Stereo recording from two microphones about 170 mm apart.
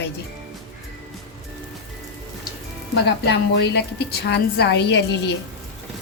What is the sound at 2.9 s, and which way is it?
A woman's voice, 80° left.